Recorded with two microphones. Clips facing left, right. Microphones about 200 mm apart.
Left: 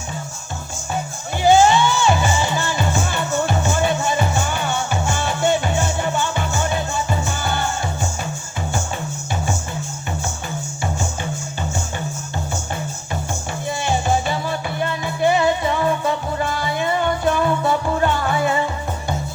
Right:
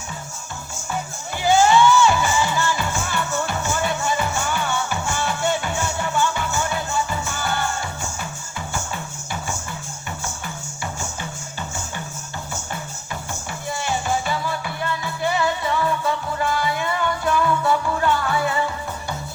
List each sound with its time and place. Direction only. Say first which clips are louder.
1.4 s music: left 2 dB; 25° left (ahead or behind)
13.7 s music: left 4 dB; 25° left (ahead or behind)